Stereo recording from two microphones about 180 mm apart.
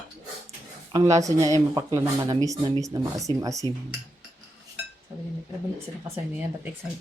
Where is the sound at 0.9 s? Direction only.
20° right (ahead or behind).